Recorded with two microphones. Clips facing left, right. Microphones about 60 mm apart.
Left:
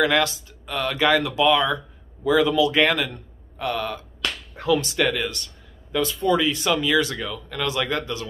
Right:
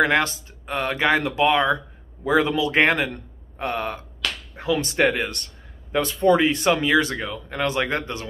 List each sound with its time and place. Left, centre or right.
0.0 s speech: right
5.3 s a sound: right
6.2 s speech: right